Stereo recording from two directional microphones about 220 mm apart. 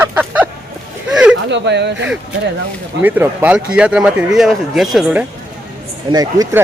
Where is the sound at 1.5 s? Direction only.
50° right (ahead or behind).